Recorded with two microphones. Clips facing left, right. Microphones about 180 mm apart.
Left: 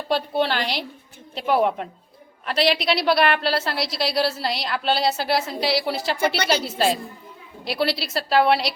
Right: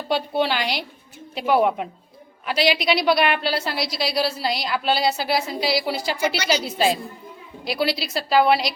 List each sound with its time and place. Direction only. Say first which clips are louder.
0.1 s a woman's voice: even; centre (ahead or behind)
6.1 s a woman's voice: left 2 dB; 55° left (ahead or behind)
6.7 s a woman's voice: right 1 dB; centre (ahead or behind)